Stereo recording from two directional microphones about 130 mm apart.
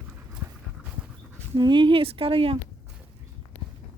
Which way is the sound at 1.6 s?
40° right (ahead or behind).